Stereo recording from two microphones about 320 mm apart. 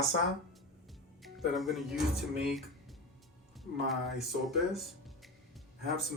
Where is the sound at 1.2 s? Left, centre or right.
Centre.